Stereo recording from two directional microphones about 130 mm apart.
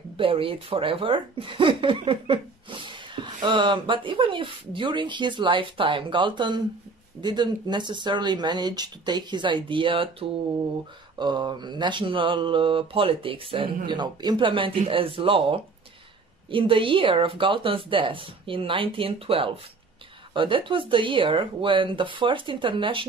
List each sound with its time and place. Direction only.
0.2 s speech: 45° right (ahead or behind)